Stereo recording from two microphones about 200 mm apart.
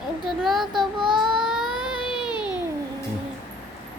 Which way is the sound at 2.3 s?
20° left (ahead or behind).